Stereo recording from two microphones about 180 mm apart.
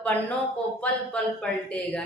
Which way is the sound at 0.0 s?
10° left (ahead or behind).